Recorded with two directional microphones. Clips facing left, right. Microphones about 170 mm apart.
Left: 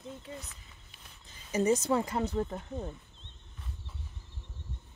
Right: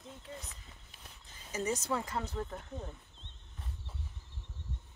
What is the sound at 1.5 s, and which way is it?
Speech, 20° left (ahead or behind).